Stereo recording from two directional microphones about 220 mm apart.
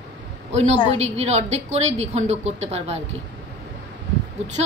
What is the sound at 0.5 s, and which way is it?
A woman's voice, 30° right (ahead or behind).